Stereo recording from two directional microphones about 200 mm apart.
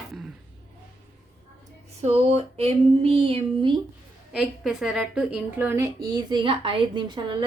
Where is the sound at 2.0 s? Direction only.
30° right (ahead or behind).